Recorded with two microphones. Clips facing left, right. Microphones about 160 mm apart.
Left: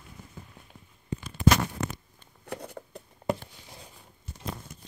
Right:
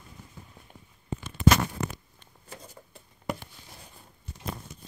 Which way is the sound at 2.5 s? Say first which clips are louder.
Left 9 dB; 65° left (ahead or behind).